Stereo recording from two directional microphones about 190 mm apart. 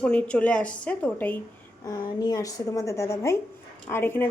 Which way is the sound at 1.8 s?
20° left (ahead or behind).